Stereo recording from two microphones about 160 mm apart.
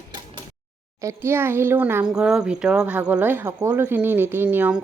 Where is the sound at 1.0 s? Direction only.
15° right (ahead or behind).